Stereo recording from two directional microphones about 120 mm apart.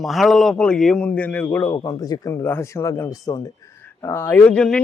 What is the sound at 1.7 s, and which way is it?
Speech, 35° left (ahead or behind).